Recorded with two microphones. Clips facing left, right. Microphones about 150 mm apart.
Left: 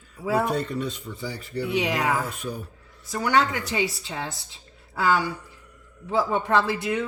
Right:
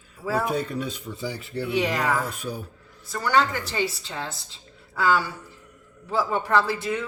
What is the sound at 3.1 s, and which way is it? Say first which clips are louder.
A woman's voice: even; 10° left (ahead or behind).